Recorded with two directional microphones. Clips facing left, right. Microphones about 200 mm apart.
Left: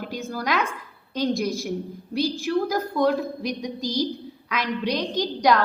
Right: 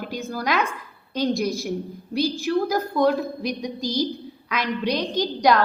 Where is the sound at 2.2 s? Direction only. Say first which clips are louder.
Right 1 dB; 35° right (ahead or behind).